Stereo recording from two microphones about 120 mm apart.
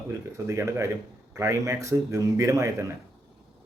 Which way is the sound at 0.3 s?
25° right (ahead or behind).